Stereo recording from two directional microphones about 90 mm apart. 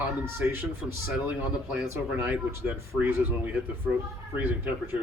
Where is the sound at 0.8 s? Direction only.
5° right (ahead or behind).